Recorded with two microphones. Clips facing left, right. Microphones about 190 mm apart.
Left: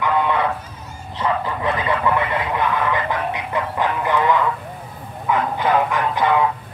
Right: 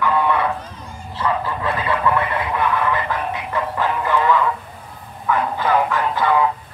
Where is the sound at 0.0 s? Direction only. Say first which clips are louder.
Right 1 dB; 20° left (ahead or behind).